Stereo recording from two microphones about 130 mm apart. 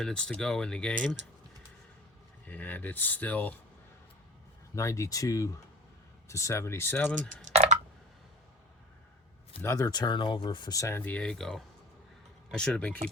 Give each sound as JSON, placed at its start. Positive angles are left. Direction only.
{"t": 0.0, "sound": "speech", "side_deg": 5}
{"t": 2.5, "sound": "speech", "side_deg": 15}
{"t": 4.7, "sound": "speech", "side_deg": 25}
{"t": 7.4, "sound": "a sound", "side_deg": -60}
{"t": 9.6, "sound": "speech", "side_deg": 25}